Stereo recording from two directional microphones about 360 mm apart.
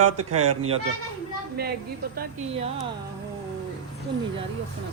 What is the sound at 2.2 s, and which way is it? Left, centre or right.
Speech, right.